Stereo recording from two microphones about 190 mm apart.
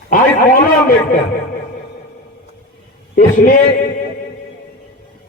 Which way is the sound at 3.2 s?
45° left (ahead or behind).